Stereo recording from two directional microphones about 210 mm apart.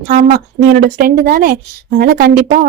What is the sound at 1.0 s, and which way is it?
Speech, 45° right (ahead or behind).